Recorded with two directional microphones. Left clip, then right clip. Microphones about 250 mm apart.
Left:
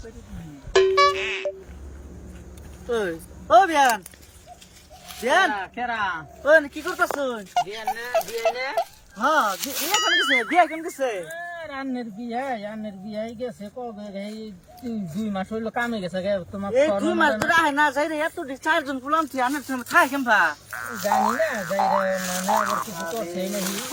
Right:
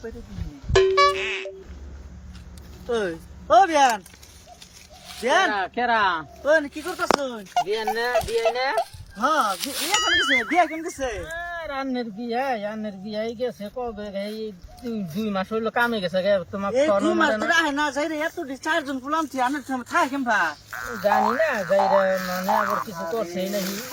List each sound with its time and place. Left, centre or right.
0.7 s music: centre
2.9 s speech: centre
5.1 s speech: centre
5.5 s speech: centre
6.4 s speech: centre
7.5 s speech: centre
11.3 s speech: centre
17.0 s speech: centre
20.7 s speech: centre
23.1 s speech: centre